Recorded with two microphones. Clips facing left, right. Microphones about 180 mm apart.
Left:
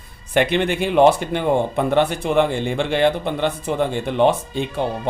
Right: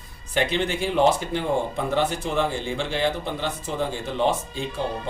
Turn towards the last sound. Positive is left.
turn(degrees=65)  # may be behind; listen again after turning